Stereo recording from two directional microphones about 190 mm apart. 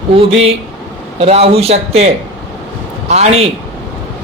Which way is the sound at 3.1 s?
35° right (ahead or behind).